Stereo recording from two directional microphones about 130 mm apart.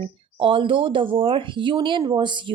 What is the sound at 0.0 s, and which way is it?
Speech, 40° right (ahead or behind).